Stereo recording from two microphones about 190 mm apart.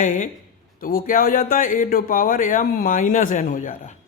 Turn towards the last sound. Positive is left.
turn(degrees=40)  # may be behind; listen again after turning